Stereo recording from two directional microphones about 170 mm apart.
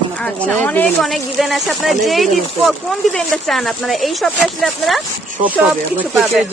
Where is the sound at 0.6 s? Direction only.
10° left (ahead or behind); by 6.4 s 5° right (ahead or behind).